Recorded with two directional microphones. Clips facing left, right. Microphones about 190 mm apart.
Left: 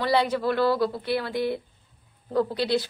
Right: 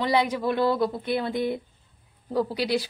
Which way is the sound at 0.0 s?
15° right (ahead or behind).